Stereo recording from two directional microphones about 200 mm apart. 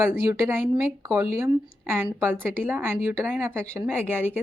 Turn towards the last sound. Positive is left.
turn(degrees=-10)  # may be behind; listen again after turning